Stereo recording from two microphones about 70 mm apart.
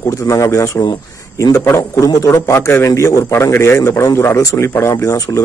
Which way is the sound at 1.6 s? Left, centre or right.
Left.